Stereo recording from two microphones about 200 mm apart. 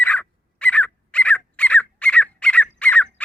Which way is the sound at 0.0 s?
10° left (ahead or behind).